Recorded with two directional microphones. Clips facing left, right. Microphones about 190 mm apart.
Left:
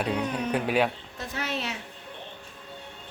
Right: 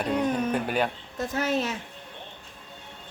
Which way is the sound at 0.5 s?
Centre (ahead or behind).